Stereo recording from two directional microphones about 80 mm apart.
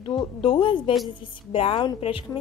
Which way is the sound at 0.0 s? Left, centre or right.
Left.